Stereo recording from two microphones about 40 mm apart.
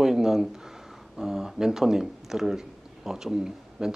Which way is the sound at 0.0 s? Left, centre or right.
Centre.